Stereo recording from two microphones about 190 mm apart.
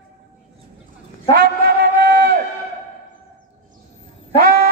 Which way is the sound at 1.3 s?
60° right (ahead or behind).